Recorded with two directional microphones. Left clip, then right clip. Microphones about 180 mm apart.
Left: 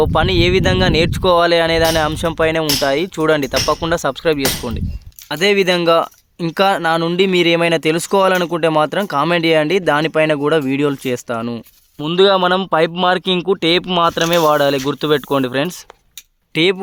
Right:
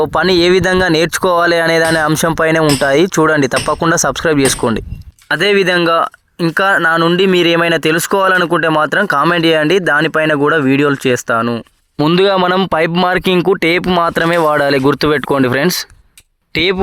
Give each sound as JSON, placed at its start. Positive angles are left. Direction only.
{"t": 0.0, "sound": "speech", "side_deg": -35}
{"t": 5.3, "sound": "speech", "side_deg": -15}
{"t": 11.9, "sound": "speech", "side_deg": -30}